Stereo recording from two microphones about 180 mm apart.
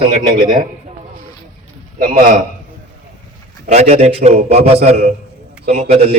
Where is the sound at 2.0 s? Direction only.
50° right (ahead or behind).